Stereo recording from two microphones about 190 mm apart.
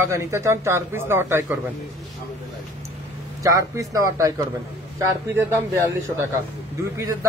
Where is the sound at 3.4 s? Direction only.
20° right (ahead or behind).